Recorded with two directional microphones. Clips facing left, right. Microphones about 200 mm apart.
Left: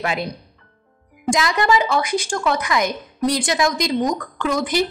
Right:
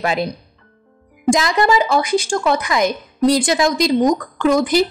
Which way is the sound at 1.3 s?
35° right (ahead or behind).